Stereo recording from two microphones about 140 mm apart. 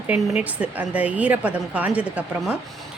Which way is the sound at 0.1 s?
10° right (ahead or behind).